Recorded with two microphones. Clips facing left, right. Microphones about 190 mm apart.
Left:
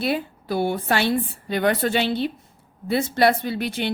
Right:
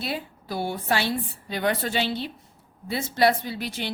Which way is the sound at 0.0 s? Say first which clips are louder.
Left 7 dB; 60° left (ahead or behind).